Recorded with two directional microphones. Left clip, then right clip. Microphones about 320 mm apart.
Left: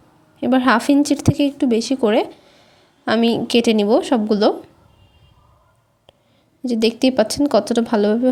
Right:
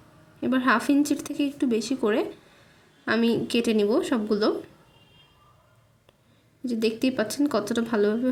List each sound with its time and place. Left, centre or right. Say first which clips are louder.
0.3 s speech: left 7 dB; centre
6.7 s speech: left 8 dB; centre